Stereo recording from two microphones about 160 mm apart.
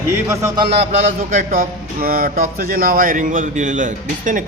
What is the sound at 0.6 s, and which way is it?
A man's voice, 40° right (ahead or behind).